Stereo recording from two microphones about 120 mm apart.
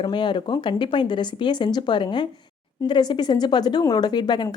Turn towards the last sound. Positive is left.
turn(degrees=40)  # may be behind; listen again after turning